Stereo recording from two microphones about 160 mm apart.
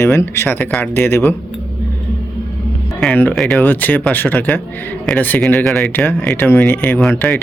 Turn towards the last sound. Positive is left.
turn(degrees=5)  # may be behind; listen again after turning